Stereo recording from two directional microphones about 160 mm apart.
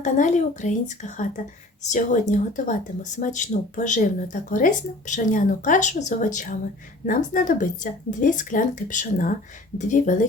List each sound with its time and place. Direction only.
0.0 s speech: 50° left (ahead or behind)